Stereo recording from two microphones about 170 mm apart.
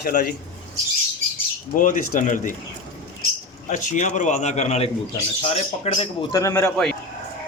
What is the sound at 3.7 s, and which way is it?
A man's voice, 45° left (ahead or behind).